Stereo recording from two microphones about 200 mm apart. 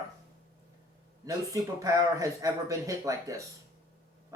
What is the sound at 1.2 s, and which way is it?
Speech, 15° right (ahead or behind).